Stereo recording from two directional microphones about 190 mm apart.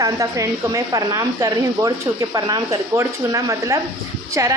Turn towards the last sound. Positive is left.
turn(degrees=-15)  # may be behind; listen again after turning